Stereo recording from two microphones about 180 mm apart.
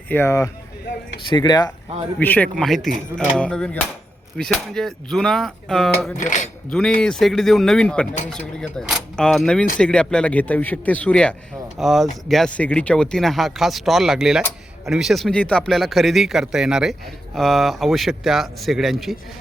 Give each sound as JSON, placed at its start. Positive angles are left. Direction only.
{"t": 0.1, "sound": "speech", "side_deg": 15}
{"t": 2.1, "sound": "speech", "side_deg": 10}
{"t": 6.1, "sound": "speech", "side_deg": 45}
{"t": 6.7, "sound": "speech", "side_deg": 5}